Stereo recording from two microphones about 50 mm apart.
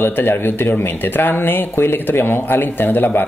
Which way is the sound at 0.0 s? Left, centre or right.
Left.